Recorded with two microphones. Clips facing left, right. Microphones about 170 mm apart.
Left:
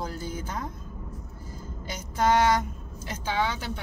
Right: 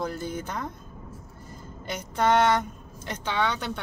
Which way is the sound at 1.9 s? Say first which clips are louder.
Right 1 dB; 60° right (ahead or behind).